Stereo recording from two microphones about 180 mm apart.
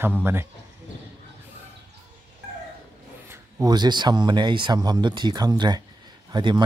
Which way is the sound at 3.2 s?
15° right (ahead or behind).